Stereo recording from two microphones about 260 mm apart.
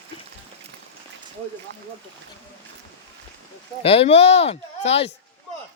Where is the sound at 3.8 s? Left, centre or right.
Left.